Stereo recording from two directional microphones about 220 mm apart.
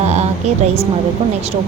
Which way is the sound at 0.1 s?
30° right (ahead or behind).